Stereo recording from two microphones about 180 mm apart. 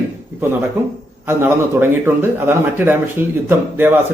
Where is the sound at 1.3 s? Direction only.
10° right (ahead or behind).